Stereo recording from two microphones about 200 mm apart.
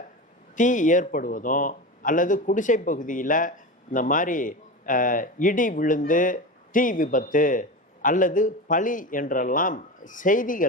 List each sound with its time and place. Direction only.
0.5 s a man's voice: 40° left (ahead or behind)